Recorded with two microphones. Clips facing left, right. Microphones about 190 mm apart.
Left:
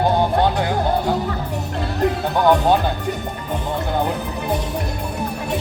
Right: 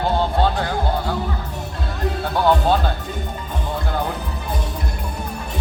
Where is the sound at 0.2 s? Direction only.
15° left (ahead or behind).